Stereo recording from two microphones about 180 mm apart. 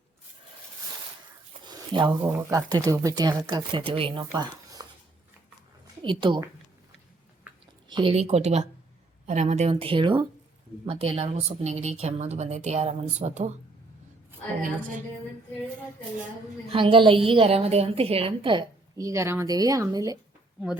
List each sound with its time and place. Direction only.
1.6 s a woman's voice: 25° right (ahead or behind)
6.0 s a woman's voice: 25° right (ahead or behind)
7.5 s chewing: 10° right (ahead or behind)
7.9 s a woman's voice: 30° right (ahead or behind)
16.7 s a woman's voice: 30° right (ahead or behind)